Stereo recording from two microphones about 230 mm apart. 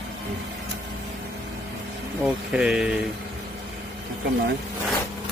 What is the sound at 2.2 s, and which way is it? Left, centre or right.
Speech, centre.